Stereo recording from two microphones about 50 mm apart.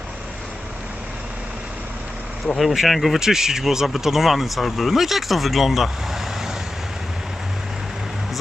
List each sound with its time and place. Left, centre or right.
2.6 s speech: centre